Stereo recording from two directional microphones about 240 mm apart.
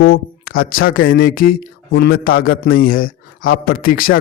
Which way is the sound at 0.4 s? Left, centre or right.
Left.